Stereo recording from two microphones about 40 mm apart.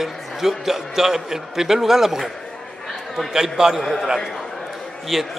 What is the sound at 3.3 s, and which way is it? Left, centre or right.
Speech, centre.